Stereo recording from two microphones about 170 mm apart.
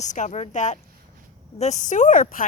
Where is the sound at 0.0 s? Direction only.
45° left (ahead or behind).